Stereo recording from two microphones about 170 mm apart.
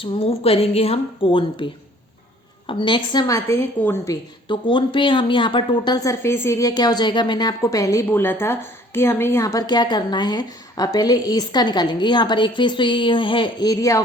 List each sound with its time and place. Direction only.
0.0 s a woman's voice: 35° left (ahead or behind)